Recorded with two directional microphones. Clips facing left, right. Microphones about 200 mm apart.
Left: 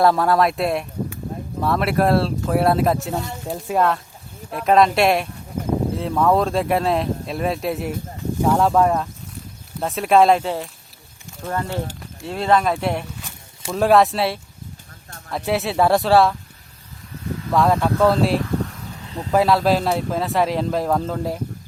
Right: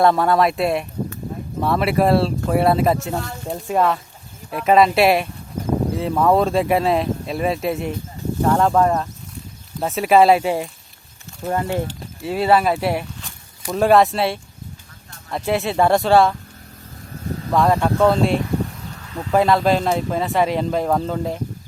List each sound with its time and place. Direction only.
0.0 s speech: centre (ahead or behind); by 11.8 s 20° right (ahead or behind)
12.2 s speech: 5° right (ahead or behind)
17.5 s speech: centre (ahead or behind)